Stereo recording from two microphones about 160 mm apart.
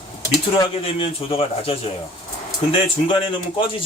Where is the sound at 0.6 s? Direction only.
35° left (ahead or behind).